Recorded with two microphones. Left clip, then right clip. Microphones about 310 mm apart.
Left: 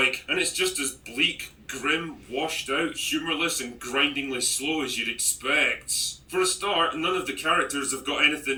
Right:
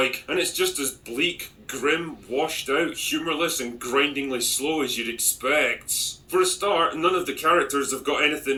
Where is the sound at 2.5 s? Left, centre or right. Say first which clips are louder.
Right 3 dB; right.